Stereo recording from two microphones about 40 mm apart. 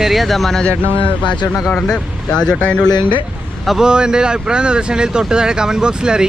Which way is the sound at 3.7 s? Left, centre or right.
Centre.